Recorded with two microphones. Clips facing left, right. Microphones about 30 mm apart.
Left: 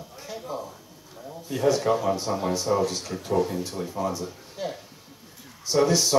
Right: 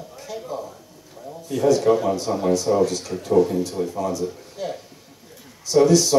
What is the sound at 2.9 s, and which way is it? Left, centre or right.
Speech, centre.